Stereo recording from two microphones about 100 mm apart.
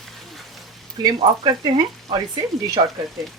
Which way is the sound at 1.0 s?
45° right (ahead or behind).